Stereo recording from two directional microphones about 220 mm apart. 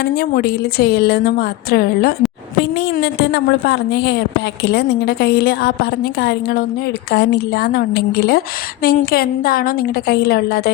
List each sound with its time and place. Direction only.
0.0 s a woman's voice: 45° left (ahead or behind)